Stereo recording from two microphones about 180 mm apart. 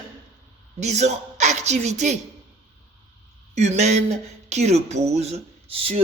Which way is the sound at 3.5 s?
40° right (ahead or behind).